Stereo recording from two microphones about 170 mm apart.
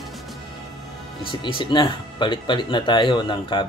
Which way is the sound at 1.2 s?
30° left (ahead or behind).